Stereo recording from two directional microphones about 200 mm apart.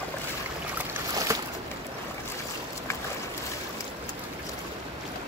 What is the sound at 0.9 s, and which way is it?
Boat, 15° right (ahead or behind).